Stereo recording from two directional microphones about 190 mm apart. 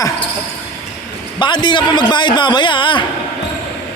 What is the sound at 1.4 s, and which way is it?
A man's voice, 25° left (ahead or behind).